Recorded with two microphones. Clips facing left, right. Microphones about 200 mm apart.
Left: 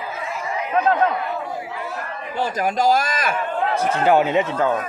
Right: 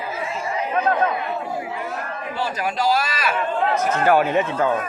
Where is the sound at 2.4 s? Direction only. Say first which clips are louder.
Left 4 dB; 50° left (ahead or behind).